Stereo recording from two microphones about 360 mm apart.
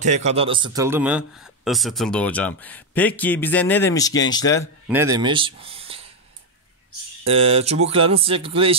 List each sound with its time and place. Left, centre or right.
0.0 s a man's voice: centre
4.8 s speech: centre
7.2 s speech: centre